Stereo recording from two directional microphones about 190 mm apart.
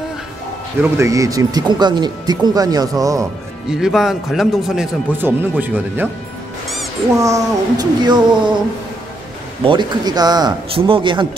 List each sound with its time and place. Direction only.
0.9 s speech: 15° right (ahead or behind)
3.7 s a man's voice: centre (ahead or behind)
7.2 s speech: 15° right (ahead or behind)
9.7 s speech: 20° right (ahead or behind)